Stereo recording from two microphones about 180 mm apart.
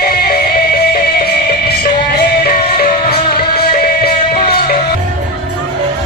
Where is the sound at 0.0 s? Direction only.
55° left (ahead or behind).